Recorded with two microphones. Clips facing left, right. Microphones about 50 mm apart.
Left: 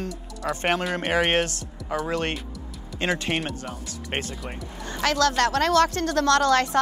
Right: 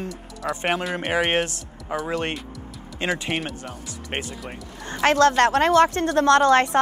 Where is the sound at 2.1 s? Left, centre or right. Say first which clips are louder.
Right 1 dB; right.